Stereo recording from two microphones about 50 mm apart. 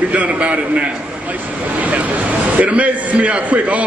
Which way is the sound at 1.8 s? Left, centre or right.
Right.